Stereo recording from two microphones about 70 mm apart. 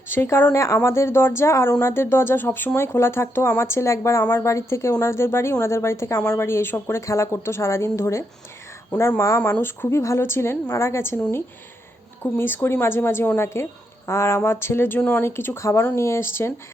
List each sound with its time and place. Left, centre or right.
0.1 s a woman's voice: left
0.6 s a woman's voice: left
4.4 s a woman's voice: left
12.2 s a woman's voice: left